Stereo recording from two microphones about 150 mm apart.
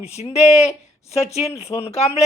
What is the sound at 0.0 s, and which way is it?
Speech, 45° left (ahead or behind).